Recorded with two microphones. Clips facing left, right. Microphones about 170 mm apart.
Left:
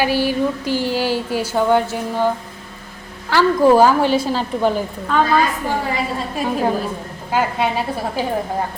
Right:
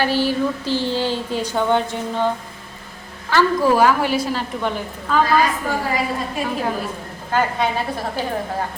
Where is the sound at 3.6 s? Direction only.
30° left (ahead or behind).